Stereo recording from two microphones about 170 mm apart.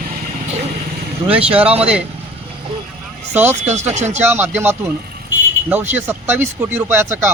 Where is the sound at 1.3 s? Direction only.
5° right (ahead or behind).